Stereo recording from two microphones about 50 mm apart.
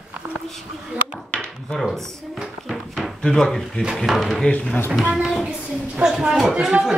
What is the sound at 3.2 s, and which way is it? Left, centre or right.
Speech, centre.